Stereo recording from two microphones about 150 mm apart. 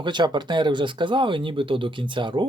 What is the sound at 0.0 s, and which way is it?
Speech, 30° right (ahead or behind).